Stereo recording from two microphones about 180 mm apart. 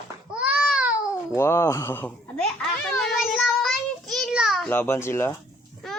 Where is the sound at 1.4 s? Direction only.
15° left (ahead or behind).